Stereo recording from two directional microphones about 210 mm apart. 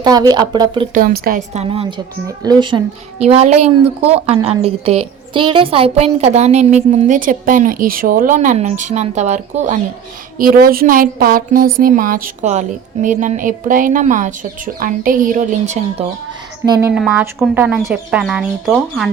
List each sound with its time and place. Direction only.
0.0 s a woman's voice: 20° right (ahead or behind)
0.9 s a woman's voice: 45° right (ahead or behind)
16.9 s speech: centre (ahead or behind)